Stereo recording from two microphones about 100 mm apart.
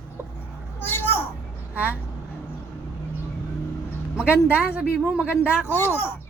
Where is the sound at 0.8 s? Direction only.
20° left (ahead or behind).